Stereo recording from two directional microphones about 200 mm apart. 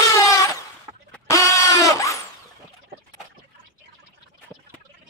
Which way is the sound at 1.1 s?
15° left (ahead or behind).